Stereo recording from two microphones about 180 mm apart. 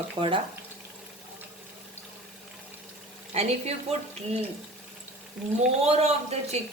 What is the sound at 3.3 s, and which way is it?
A woman's voice, 35° right (ahead or behind).